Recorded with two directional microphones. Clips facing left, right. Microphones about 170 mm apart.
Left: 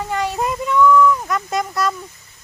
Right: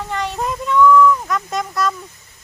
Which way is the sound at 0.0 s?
5° left (ahead or behind).